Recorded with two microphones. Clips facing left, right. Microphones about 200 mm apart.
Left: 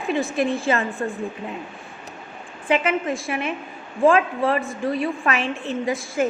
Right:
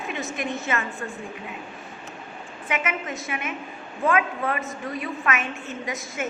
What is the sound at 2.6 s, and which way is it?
A woman's voice, 30° left (ahead or behind).